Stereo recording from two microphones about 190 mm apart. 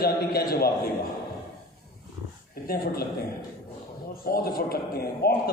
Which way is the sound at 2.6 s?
50° left (ahead or behind).